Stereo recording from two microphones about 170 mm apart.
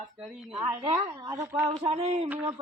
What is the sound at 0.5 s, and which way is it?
Speech, 25° right (ahead or behind).